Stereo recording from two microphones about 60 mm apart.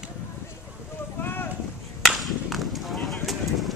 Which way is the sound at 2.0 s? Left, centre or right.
Centre.